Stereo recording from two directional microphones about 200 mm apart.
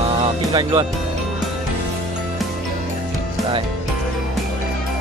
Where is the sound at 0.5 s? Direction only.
20° right (ahead or behind).